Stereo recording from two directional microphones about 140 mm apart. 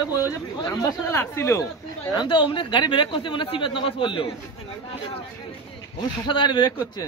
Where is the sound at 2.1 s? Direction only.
35° left (ahead or behind).